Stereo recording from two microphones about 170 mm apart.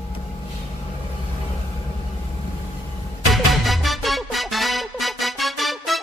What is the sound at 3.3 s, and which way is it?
Music, centre (ahead or behind).